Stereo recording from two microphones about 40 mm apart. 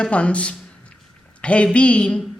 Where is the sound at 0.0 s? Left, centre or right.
Left.